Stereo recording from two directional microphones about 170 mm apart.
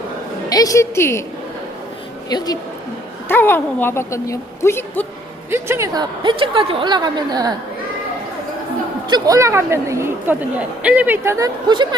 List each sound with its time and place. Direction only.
0.5 s a woman's voice: 20° left (ahead or behind)
2.3 s a woman's voice: 25° left (ahead or behind)
3.2 s a woman's voice: 10° left (ahead or behind)
5.5 s a woman's voice: 15° right (ahead or behind)
9.0 s speech: 25° right (ahead or behind)